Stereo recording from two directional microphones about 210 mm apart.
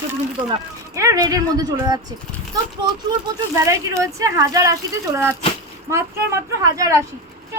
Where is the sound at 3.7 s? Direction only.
15° right (ahead or behind).